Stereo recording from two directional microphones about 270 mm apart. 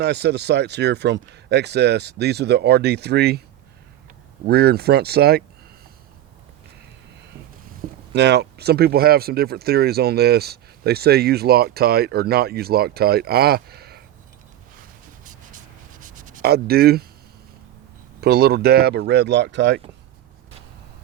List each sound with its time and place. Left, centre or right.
0.0 s speech: right
4.4 s speech: right
8.1 s speech: right
16.0 s rub: right
18.2 s speech: right